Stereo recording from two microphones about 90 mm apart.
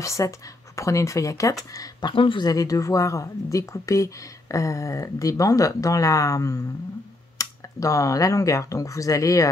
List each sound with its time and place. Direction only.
0.0 s a woman's voice: 35° left (ahead or behind)
2.1 s speech: 70° left (ahead or behind)
2.4 s a woman's voice: 40° left (ahead or behind)